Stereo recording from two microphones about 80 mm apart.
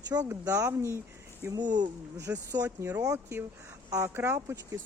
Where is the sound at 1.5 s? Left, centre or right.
Right.